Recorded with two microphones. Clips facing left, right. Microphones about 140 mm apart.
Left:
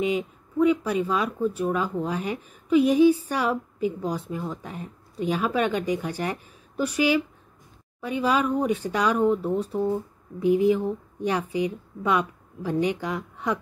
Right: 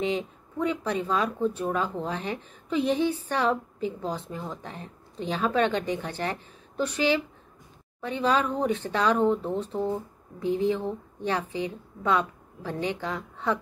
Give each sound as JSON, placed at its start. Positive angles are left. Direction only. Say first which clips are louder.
{"t": 0.0, "sound": "speech", "louder": "left 3 dB", "side_deg": 10}